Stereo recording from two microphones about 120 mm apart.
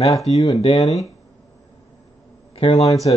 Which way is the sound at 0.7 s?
30° left (ahead or behind).